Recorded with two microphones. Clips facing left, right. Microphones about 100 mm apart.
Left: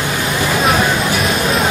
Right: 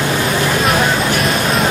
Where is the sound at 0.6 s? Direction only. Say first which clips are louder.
Even; centre (ahead or behind).